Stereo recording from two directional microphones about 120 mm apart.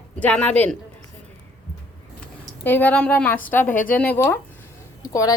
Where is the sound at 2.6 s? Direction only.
15° left (ahead or behind).